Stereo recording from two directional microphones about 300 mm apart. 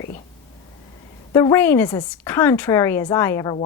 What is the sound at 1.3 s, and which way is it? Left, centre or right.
A woman's voice, centre.